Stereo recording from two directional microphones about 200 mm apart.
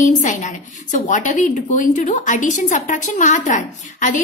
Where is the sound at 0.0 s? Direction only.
40° left (ahead or behind).